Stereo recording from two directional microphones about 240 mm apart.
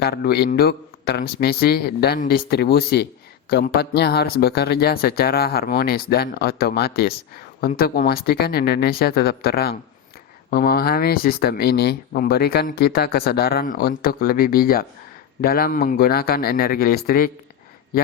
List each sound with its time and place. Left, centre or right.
0.0 s speech: left